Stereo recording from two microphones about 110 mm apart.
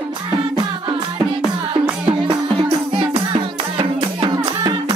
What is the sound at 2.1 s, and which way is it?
Music, 50° right (ahead or behind).